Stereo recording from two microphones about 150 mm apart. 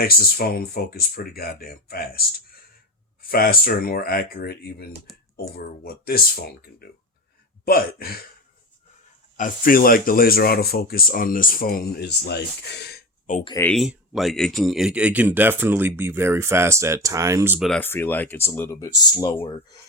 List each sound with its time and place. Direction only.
0.0 s speech: 80° left
3.2 s speech: 80° left
9.4 s speech: 70° left (ahead or behind); by 12.4 s 90° left
12.8 s gasp: 90° left
13.7 s speech: centre (ahead or behind); by 17.6 s 20° right (ahead or behind)
17.7 s speech: 15° left (ahead or behind)